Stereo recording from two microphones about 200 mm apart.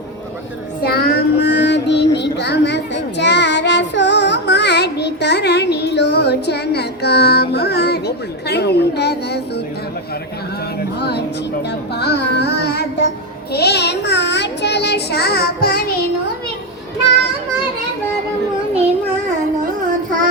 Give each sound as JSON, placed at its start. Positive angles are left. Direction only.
{"t": 0.8, "sound": "child singing", "side_deg": 50}
{"t": 10.8, "sound": "a sound", "side_deg": 55}
{"t": 11.9, "sound": "music", "side_deg": 55}
{"t": 13.5, "sound": "child singing", "side_deg": 55}